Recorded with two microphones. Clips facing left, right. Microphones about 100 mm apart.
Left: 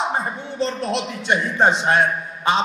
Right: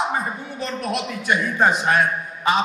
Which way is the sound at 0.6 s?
25° left (ahead or behind).